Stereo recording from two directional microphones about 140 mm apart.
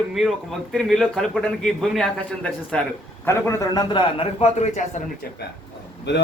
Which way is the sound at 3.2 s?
20° left (ahead or behind).